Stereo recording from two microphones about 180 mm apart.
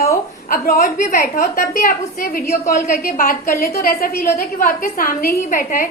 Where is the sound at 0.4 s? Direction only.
50° left (ahead or behind).